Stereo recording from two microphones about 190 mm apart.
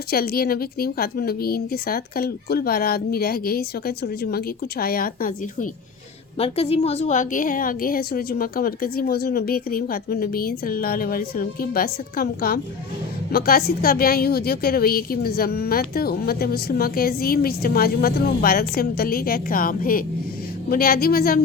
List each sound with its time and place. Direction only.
0.1 s a woman's voice: 55° left (ahead or behind)
6.4 s a woman's voice: 30° left (ahead or behind); by 21.4 s 55° left (ahead or behind)